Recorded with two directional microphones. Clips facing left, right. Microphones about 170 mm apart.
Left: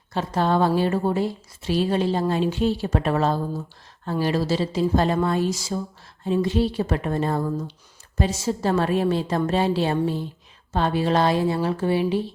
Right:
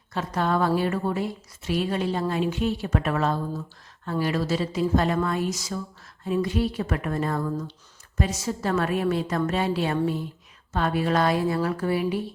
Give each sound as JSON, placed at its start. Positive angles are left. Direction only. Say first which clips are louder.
{"t": 0.1, "sound": "speech", "louder": "left 3 dB", "side_deg": 30}